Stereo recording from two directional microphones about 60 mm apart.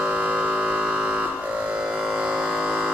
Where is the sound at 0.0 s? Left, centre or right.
Right.